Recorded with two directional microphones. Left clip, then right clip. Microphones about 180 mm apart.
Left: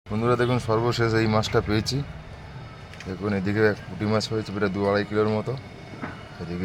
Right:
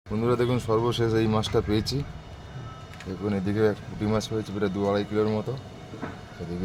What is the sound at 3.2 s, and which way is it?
Speech, 5° left (ahead or behind).